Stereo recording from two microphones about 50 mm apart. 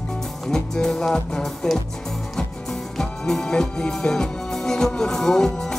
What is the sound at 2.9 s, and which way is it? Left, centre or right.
Music, centre.